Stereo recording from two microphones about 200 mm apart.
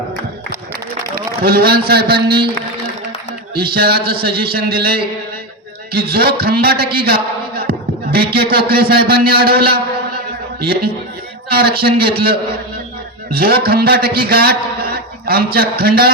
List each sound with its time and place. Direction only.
1.1 s a man's voice: 50° right (ahead or behind)
3.5 s a man's voice: 50° right (ahead or behind)
7.7 s a sound: 50° right (ahead or behind)
8.7 s a man's voice: 50° right (ahead or behind)
11.4 s a man's voice: 50° right (ahead or behind)
13.3 s a man's voice: 50° right (ahead or behind)